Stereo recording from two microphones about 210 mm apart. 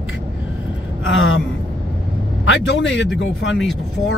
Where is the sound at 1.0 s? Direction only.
60° left (ahead or behind).